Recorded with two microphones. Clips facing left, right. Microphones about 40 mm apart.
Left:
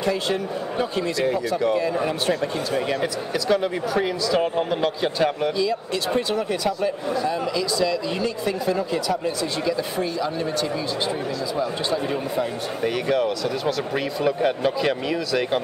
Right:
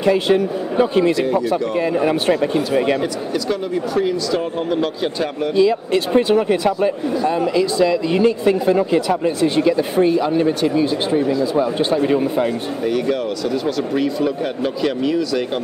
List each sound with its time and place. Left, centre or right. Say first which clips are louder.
0.0 s speech: right 8 dB; right
3.0 s speech: right 4 dB; centre
5.6 s speech: right 8 dB; right
11.5 s speech: right 7 dB; right
12.8 s speech: right 2 dB; centre